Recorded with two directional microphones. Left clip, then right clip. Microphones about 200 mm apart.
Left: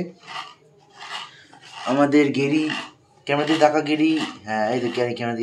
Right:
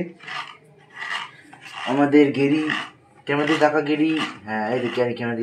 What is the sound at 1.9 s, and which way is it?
Speech, centre (ahead or behind).